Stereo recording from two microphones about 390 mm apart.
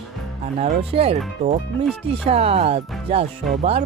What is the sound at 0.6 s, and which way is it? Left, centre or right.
Speech, centre.